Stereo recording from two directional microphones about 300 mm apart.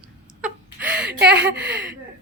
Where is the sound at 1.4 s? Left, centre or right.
Right.